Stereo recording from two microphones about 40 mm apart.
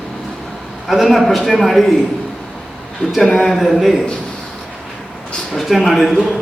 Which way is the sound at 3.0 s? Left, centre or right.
Left.